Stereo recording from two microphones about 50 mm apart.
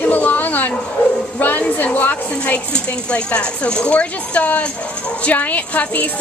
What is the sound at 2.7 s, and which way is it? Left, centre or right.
Speech, left.